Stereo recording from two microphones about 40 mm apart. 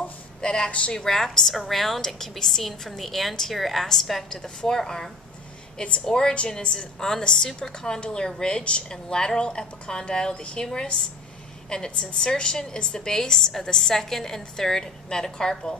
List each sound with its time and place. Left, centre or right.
0.4 s a woman's voice: left
0.9 s a woman's voice: centre
11.7 s a woman's voice: centre